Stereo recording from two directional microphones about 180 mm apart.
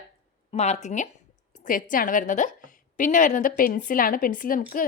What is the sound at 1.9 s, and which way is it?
A woman's voice, 50° left (ahead or behind).